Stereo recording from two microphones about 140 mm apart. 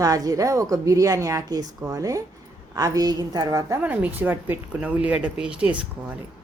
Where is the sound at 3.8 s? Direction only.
10° right (ahead or behind).